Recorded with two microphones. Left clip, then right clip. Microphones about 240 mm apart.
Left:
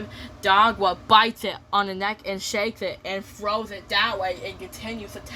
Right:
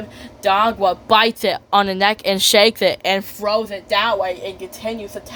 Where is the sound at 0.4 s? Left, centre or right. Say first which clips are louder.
Right 3 dB; centre.